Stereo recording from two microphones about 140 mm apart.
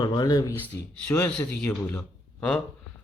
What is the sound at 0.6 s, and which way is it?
Speech, 10° left (ahead or behind).